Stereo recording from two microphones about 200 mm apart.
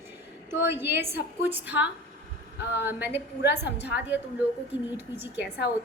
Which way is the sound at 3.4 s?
55° left (ahead or behind).